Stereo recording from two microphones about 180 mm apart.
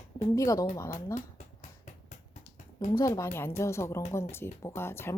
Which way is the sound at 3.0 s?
15° left (ahead or behind).